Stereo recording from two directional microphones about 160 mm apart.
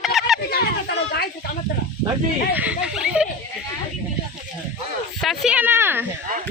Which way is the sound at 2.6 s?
5° right (ahead or behind).